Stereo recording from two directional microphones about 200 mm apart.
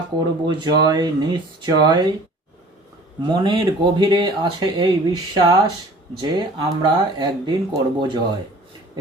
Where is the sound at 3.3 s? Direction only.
20° right (ahead or behind).